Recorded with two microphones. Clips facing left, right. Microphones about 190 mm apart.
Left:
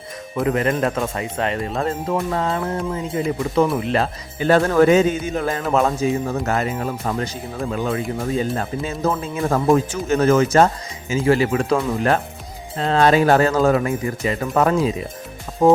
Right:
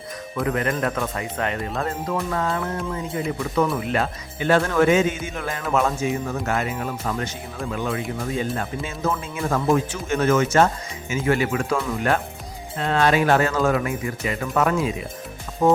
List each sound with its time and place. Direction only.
0.3 s speech: 25° left (ahead or behind)